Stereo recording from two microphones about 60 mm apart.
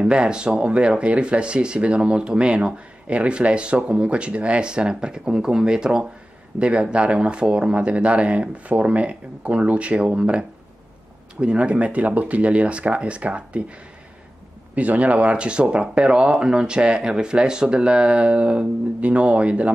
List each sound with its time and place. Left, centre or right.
0.0 s speech: centre
14.8 s speech: right